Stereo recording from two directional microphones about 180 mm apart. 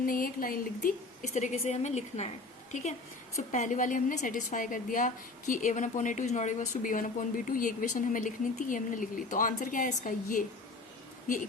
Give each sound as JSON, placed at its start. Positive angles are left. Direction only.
{"t": 0.0, "sound": "a woman's voice", "side_deg": 50}
{"t": 3.3, "sound": "a woman's voice", "side_deg": 40}